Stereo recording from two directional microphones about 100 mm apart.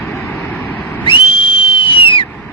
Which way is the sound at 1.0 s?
60° left (ahead or behind).